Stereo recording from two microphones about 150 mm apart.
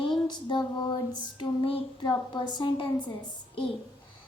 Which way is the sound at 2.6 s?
30° left (ahead or behind).